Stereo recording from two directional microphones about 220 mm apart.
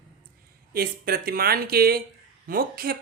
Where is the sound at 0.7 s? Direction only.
45° right (ahead or behind).